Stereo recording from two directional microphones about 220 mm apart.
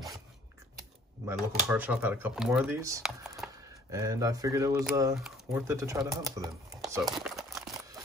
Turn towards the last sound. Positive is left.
turn(degrees=0)  # may be behind; listen again after turning